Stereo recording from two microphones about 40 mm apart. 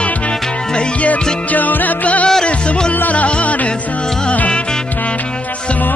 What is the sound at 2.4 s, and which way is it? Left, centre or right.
Music, left.